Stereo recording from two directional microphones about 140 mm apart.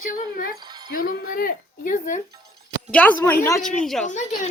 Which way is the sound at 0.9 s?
90° left.